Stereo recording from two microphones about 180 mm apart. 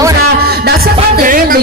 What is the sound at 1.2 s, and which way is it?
Speech, 50° right (ahead or behind).